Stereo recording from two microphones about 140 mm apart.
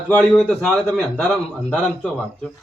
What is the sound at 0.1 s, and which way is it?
A man's voice, 10° left (ahead or behind).